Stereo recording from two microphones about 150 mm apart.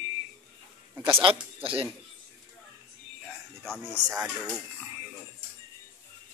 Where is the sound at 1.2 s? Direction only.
40° right (ahead or behind).